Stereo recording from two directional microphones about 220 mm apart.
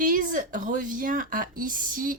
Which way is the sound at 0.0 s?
40° right (ahead or behind).